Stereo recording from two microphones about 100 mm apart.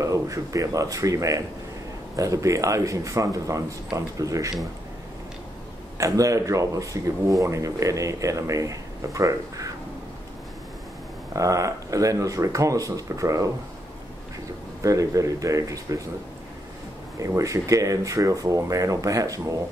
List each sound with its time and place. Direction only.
0.0 s speech: 35° right (ahead or behind)
5.9 s speech: 35° right (ahead or behind)
11.3 s speech: 35° right (ahead or behind)
14.8 s speech: 35° right (ahead or behind)
17.4 s speech: 35° right (ahead or behind)